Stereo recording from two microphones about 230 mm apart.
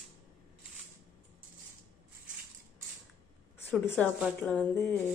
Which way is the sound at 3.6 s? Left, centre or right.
Centre.